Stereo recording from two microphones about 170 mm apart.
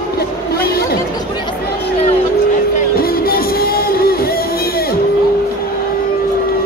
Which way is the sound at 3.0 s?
65° left (ahead or behind).